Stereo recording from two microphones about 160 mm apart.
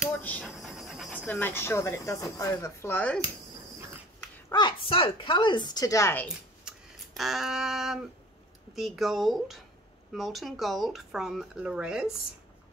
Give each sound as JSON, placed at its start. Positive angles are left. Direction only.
{"t": 0.1, "sound": "pant", "side_deg": 10}
{"t": 0.5, "sound": "pant", "side_deg": 0}
{"t": 1.2, "sound": "speech", "side_deg": 10}
{"t": 4.5, "sound": "a woman's voice", "side_deg": 30}
{"t": 6.7, "sound": "a sound", "side_deg": -5}
{"t": 7.2, "sound": "speech", "side_deg": 0}